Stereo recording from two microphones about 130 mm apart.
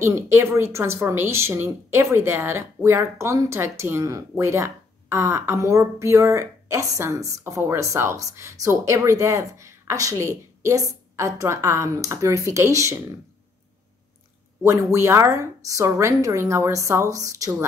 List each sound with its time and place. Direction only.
0.0 s speech: 20° right (ahead or behind)
14.6 s speech: 20° right (ahead or behind)